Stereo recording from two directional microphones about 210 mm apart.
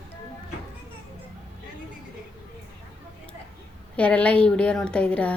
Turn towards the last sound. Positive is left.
turn(degrees=5)  # may be behind; listen again after turning